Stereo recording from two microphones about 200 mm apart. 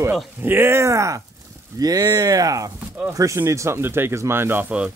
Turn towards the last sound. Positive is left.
turn(degrees=-10)  # may be behind; listen again after turning